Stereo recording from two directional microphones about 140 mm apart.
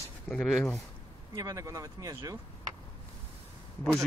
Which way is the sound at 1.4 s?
25° right (ahead or behind).